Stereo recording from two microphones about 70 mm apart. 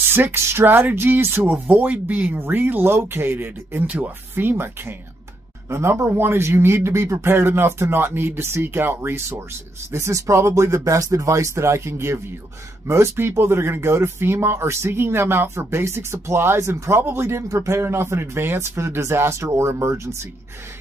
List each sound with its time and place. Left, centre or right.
0.0 s speech: right
5.7 s speech: right
10.8 s speech: right